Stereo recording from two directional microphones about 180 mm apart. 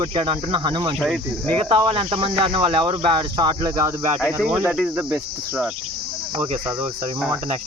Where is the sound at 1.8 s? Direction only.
30° right (ahead or behind).